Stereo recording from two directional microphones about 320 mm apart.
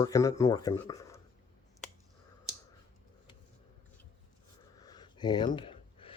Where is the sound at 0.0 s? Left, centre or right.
Centre.